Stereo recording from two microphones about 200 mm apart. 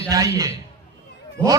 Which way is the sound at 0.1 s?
15° right (ahead or behind).